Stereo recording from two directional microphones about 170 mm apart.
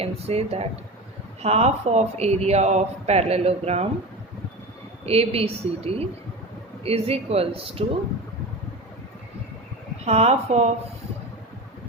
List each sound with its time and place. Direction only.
0.0 s a man's voice: 35° right (ahead or behind)
5.0 s a man's voice: 35° right (ahead or behind)
10.1 s a man's voice: 40° right (ahead or behind)